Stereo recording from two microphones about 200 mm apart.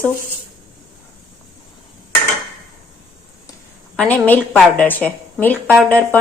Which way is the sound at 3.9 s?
10° left (ahead or behind).